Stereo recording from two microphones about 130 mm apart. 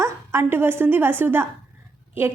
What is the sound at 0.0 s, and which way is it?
A woman's voice, 20° right (ahead or behind).